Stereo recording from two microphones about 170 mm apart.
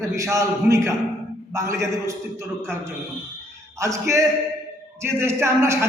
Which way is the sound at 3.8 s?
20° right (ahead or behind).